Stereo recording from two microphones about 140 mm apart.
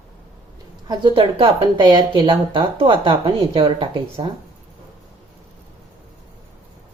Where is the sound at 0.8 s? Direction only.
30° right (ahead or behind).